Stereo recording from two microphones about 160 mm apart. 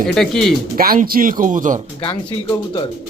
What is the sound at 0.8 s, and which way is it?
Speech, 65° right (ahead or behind).